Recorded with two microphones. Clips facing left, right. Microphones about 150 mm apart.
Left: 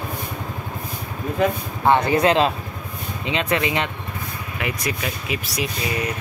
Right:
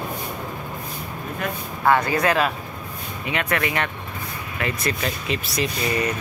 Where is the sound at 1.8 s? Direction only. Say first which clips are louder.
Left 3 dB; 25° left (ahead or behind).